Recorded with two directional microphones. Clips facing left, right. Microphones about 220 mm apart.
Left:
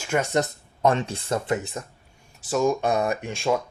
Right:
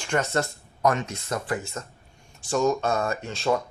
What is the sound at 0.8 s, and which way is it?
Speech, 30° left (ahead or behind).